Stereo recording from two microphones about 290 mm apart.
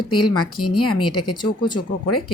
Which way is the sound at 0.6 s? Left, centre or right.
Left.